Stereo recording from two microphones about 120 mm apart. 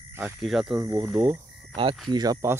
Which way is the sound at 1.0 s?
20° right (ahead or behind).